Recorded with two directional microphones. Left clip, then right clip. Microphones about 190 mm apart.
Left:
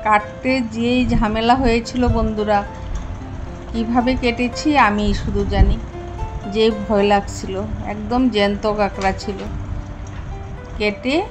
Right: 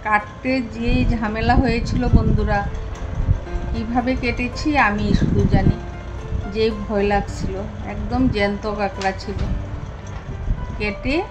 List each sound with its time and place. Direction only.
0.0 s a woman's voice: 25° left (ahead or behind)
3.7 s a woman's voice: 25° left (ahead or behind)
10.8 s a woman's voice: 25° left (ahead or behind)